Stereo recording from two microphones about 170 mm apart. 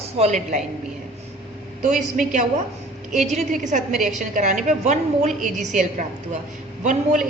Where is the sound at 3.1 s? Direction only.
45° right (ahead or behind).